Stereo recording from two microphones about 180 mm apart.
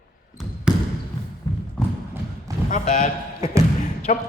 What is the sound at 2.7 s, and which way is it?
A man's voice, 45° left (ahead or behind).